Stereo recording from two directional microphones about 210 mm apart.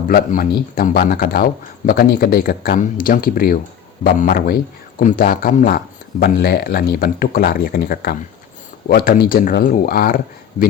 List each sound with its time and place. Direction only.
0.1 s speech: 40° left (ahead or behind)